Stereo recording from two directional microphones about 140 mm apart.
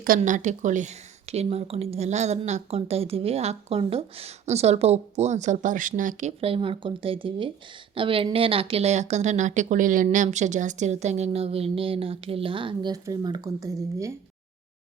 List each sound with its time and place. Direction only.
0.2 s speech: 60° right (ahead or behind)
6.4 s speech: 40° right (ahead or behind); by 14.1 s 25° right (ahead or behind)